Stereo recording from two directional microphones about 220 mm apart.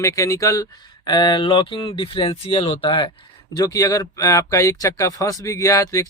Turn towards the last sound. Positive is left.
turn(degrees=15)  # may be behind; listen again after turning